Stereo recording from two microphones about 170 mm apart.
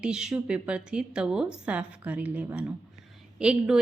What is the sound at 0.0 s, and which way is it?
A woman's voice, 5° right (ahead or behind).